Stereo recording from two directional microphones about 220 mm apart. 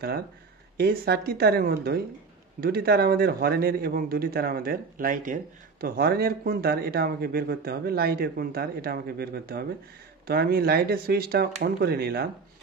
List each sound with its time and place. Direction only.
0.7 s a man's voice: 45° right (ahead or behind)